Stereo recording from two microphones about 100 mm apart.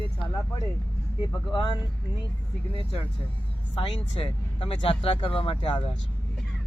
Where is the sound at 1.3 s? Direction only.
55° left (ahead or behind).